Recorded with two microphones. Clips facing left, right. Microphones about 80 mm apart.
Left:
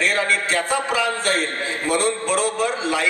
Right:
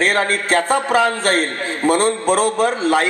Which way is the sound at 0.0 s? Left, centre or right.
Right.